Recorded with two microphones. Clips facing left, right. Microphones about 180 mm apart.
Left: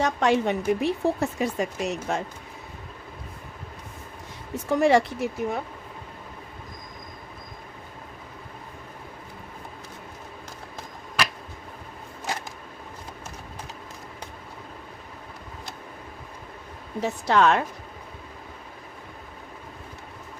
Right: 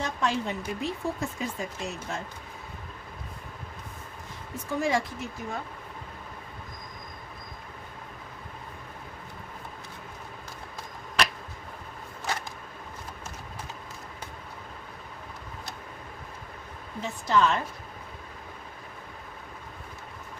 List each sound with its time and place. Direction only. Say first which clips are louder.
0.0 s speech: left 7 dB; 70° left (ahead or behind)
4.7 s speech: left 8 dB; 70° left (ahead or behind)
17.0 s speech: left 4 dB; 70° left (ahead or behind)